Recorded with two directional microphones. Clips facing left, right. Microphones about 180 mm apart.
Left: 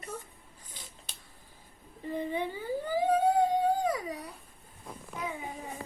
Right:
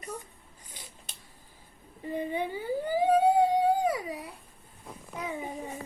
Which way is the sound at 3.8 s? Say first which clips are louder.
Right 2 dB; 10° right (ahead or behind).